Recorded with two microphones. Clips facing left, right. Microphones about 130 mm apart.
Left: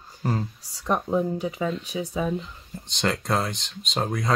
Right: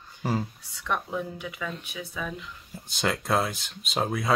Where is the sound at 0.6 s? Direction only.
35° left (ahead or behind).